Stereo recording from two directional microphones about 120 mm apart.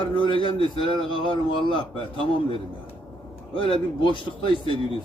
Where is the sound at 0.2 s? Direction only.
45° left (ahead or behind).